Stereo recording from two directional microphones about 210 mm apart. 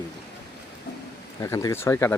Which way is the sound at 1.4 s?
15° left (ahead or behind).